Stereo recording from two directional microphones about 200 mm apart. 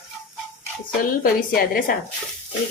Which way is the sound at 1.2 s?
45° left (ahead or behind).